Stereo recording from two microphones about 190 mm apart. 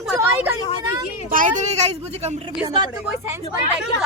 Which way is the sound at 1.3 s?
40° right (ahead or behind).